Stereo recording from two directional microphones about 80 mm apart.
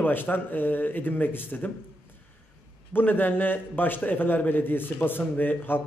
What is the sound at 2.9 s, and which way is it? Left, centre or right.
A man's voice, left.